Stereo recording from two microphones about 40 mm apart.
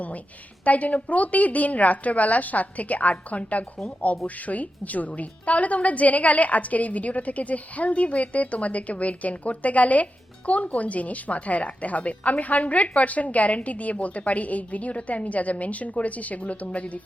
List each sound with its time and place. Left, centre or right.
0.6 s a woman's voice: left